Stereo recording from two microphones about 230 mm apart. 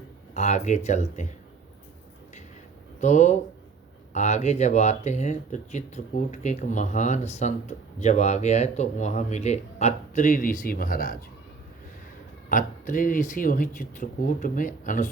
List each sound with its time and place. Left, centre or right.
0.3 s speech: left
3.0 s speech: left
12.5 s speech: left